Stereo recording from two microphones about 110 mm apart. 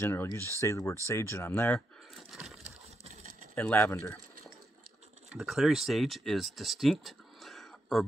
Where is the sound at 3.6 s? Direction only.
20° left (ahead or behind).